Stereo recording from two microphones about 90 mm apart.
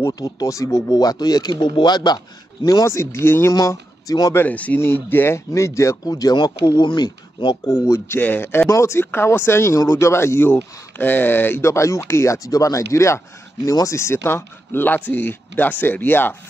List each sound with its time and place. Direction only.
0.1 s speech: 40° left (ahead or behind)
3.5 s speech: 45° left (ahead or behind)
4.3 s speech: 25° left (ahead or behind)
6.0 s speech: 45° left (ahead or behind); by 7.5 s 60° left (ahead or behind)
7.6 s speech: 35° left (ahead or behind)
8.2 s speech: 20° left (ahead or behind)